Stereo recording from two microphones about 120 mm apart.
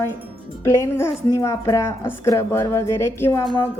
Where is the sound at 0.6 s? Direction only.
25° left (ahead or behind).